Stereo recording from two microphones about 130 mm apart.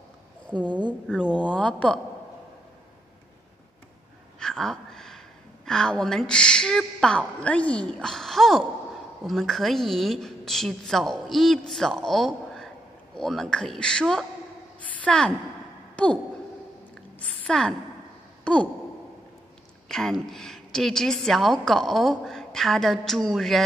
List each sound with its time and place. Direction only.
0.7 s a woman's voice: 35° right (ahead or behind)
1.0 s a woman's voice: 5° right (ahead or behind)
1.3 s speech: 10° left (ahead or behind)
4.4 s a sound: 5° left (ahead or behind)
5.7 s a woman's voice: 5° left (ahead or behind)
16.0 s sigh: 10° left (ahead or behind)
16.9 s a sound: 5° left (ahead or behind)
18.4 s sigh: 10° left (ahead or behind)
19.9 s a woman's voice: 5° left (ahead or behind)